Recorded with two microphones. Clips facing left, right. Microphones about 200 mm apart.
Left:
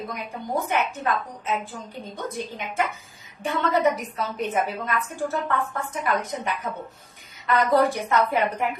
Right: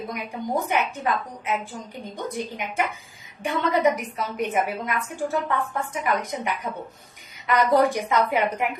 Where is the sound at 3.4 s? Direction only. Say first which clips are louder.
Right 1 dB; 15° right (ahead or behind).